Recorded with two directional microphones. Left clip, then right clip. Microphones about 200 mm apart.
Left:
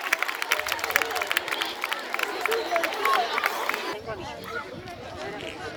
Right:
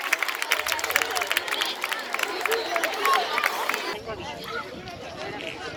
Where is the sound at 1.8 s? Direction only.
50° left (ahead or behind).